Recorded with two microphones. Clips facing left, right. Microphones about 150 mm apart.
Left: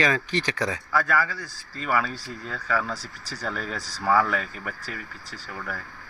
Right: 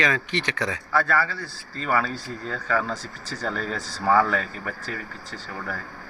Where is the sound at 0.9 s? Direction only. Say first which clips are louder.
Right 2 dB; 10° left (ahead or behind).